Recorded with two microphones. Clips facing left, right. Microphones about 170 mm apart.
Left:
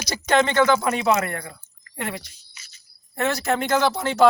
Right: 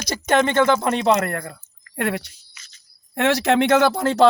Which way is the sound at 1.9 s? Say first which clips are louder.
Right 7 dB; 65° right (ahead or behind).